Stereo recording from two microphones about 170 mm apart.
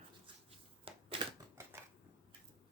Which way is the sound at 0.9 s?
30° right (ahead or behind).